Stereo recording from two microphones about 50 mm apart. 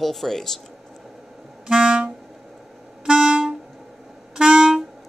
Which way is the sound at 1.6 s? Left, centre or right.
Centre.